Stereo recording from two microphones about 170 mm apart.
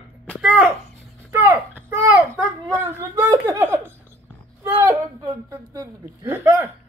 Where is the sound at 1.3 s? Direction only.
15° right (ahead or behind).